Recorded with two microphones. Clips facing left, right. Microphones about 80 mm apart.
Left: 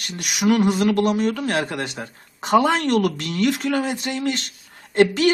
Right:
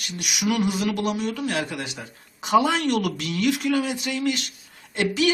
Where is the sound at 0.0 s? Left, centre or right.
Left.